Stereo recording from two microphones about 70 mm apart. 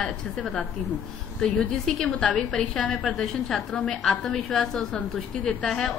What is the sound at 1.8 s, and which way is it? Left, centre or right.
A woman's voice, centre.